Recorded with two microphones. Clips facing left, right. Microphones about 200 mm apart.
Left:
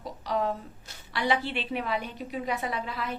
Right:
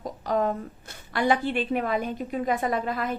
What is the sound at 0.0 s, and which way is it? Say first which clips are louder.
A woman's voice: right 4 dB; 50° right (ahead or behind).